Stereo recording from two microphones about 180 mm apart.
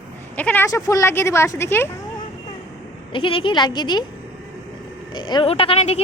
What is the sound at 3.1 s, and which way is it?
Speech, 30° left (ahead or behind).